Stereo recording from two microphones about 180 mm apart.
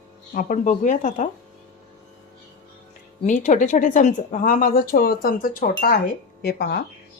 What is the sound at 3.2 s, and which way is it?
Speech, 45° left (ahead or behind).